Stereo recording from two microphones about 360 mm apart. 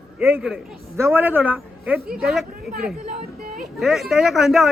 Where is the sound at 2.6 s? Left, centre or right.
Right.